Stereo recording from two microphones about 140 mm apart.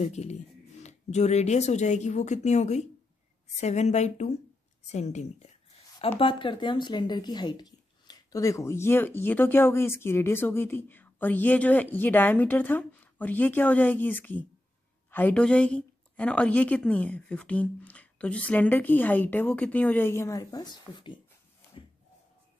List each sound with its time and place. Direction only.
0.0 s speech: 50° left (ahead or behind)
5.9 s speech: 40° left (ahead or behind)